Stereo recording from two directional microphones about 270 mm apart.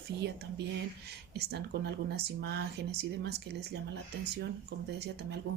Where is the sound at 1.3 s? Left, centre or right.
Right.